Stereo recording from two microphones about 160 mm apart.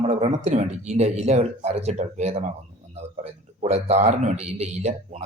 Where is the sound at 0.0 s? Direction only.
40° right (ahead or behind).